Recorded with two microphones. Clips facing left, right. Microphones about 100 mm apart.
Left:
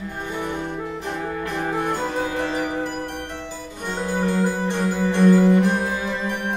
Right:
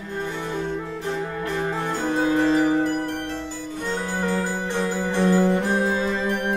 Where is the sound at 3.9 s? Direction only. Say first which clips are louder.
Left 2 dB; 20° left (ahead or behind).